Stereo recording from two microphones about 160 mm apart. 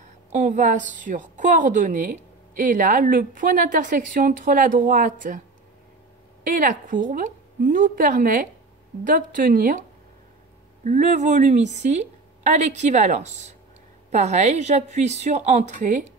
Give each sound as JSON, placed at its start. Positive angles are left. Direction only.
{"t": 0.3, "sound": "a woman's voice", "side_deg": -50}
{"t": 6.4, "sound": "a woman's voice", "side_deg": -55}